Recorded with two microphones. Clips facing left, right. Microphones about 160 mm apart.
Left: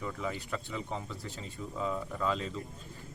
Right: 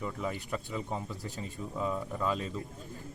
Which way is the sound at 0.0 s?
20° right (ahead or behind).